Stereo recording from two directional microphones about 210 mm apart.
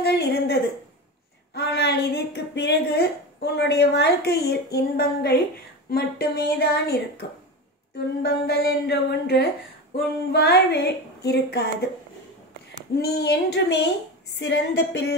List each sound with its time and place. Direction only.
0.0 s a sound: 50° left (ahead or behind)
1.5 s a woman's voice: 50° left (ahead or behind)
12.9 s a woman's voice: 50° left (ahead or behind)